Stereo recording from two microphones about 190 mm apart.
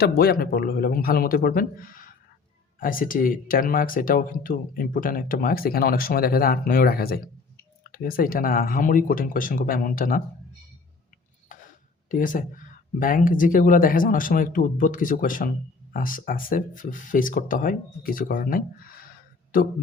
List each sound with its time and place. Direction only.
0.0 s speech: 55° left (ahead or behind)
11.4 s a sound: 45° left (ahead or behind)
12.1 s speech: 45° left (ahead or behind)